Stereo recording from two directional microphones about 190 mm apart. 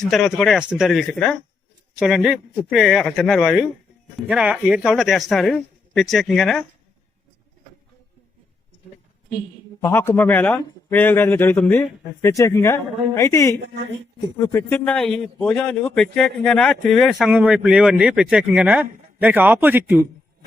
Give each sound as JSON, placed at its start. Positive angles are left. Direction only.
{"t": 0.0, "sound": "a man's voice", "side_deg": 0}
{"t": 9.8, "sound": "a man's voice", "side_deg": 10}
{"t": 14.8, "sound": "a man's voice", "side_deg": 5}